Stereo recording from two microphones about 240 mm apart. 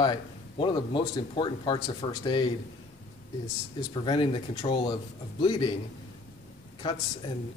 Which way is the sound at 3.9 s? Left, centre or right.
Centre.